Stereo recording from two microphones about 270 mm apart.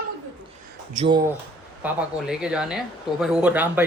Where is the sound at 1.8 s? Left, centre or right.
Centre.